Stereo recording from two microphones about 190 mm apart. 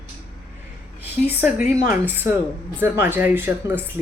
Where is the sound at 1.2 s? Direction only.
10° right (ahead or behind).